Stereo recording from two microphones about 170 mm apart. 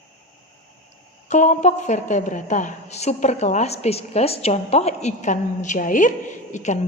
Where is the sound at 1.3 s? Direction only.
45° left (ahead or behind).